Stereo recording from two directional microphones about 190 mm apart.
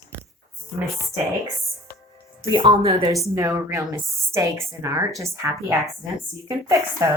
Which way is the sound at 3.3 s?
15° right (ahead or behind).